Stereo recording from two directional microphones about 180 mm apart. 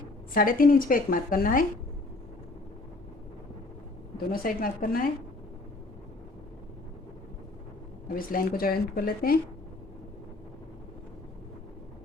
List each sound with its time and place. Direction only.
0.3 s speech: 50° left (ahead or behind)
4.3 s speech: 50° left (ahead or behind)
8.1 s speech: 50° left (ahead or behind)